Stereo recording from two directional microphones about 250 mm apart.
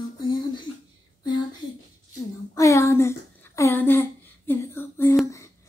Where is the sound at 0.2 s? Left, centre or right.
Centre.